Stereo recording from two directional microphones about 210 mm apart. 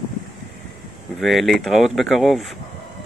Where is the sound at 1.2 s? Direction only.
Centre (ahead or behind).